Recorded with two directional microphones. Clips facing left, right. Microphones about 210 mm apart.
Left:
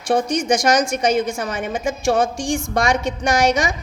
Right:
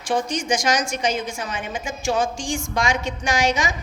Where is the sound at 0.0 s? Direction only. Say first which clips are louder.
Left 5 dB; 65° left (ahead or behind).